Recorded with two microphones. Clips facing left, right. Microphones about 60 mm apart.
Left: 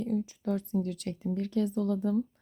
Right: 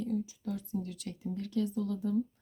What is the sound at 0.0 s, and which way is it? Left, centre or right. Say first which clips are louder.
A woman's voice: left 3 dB; left.